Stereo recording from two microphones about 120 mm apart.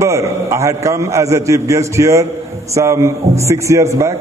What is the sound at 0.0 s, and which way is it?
A man's voice, 25° right (ahead or behind).